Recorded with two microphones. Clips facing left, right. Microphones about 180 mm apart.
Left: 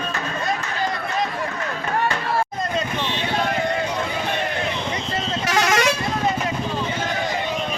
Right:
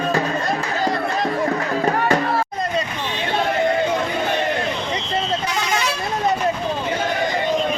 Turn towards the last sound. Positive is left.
turn(degrees=80)